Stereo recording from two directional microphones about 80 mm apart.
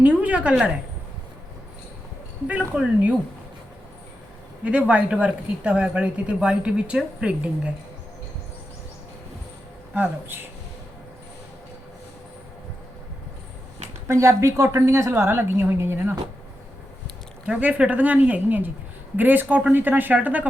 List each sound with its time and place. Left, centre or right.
0.0 s a woman's voice: centre
2.5 s speech: centre
4.6 s speech: centre
9.9 s a woman's voice: right
14.1 s a woman's voice: right
17.4 s a woman's voice: centre